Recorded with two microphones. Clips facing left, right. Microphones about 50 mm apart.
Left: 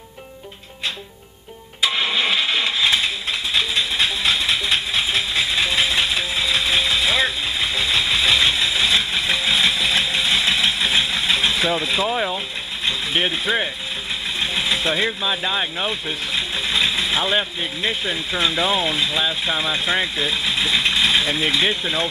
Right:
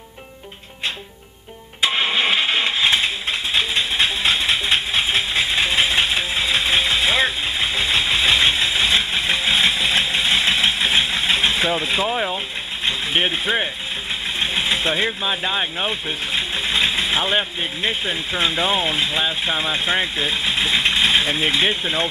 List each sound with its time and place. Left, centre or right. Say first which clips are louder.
1.8 s engine starting: right 1 dB; right
11.8 s speech: even; right
12.1 s speech: even; centre
12.8 s a sound: right 1 dB; centre
14.4 s vehicle: right 1 dB; right
15.2 s speech: even; centre